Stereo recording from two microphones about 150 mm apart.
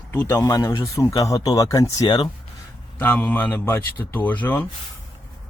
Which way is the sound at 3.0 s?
10° left (ahead or behind).